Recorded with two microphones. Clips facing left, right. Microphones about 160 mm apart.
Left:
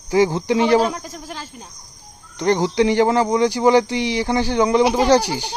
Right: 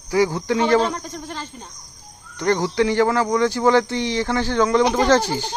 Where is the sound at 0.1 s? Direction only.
20° left (ahead or behind).